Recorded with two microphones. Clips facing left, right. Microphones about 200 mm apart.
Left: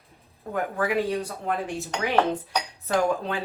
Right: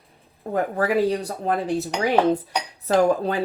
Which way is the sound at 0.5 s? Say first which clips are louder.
Right 4 dB; 35° right (ahead or behind).